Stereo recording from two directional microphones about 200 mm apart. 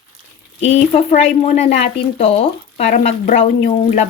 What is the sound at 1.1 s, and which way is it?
Speech, 35° left (ahead or behind).